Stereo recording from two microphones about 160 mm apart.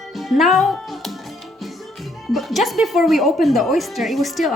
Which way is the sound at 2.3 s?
Centre (ahead or behind).